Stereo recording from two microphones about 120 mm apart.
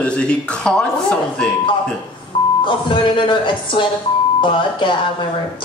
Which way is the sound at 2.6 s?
45° left (ahead or behind).